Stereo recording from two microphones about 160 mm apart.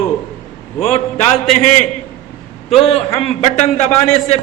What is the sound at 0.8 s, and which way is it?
A man's voice, 40° left (ahead or behind).